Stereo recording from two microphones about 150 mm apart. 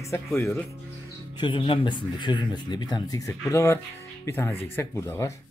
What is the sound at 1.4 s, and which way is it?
Speech, 35° left (ahead or behind).